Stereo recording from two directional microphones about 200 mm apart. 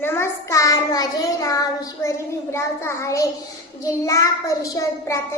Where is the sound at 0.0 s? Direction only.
10° left (ahead or behind).